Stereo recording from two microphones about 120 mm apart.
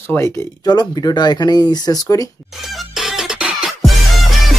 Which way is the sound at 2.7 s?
Centre (ahead or behind).